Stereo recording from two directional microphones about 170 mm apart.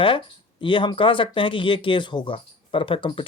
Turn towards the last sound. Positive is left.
turn(degrees=30)  # may be behind; listen again after turning